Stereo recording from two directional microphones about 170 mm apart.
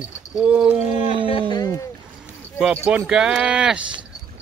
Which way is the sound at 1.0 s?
30° left (ahead or behind).